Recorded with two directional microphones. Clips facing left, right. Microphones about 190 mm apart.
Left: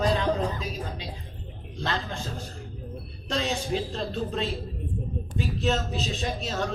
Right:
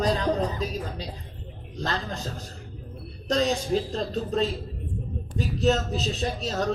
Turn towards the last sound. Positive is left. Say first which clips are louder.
# right 2 dB
turn(degrees=-35)  # may be behind; listen again after turning